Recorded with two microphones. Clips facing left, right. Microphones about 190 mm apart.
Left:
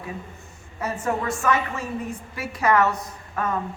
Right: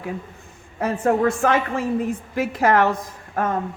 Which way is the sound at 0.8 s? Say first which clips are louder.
Right 7 dB; 55° right (ahead or behind).